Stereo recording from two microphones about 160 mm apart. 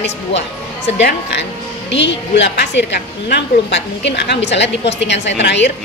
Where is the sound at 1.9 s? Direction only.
90° left.